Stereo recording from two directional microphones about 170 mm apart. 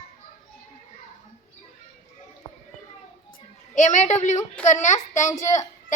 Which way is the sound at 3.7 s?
45° left (ahead or behind).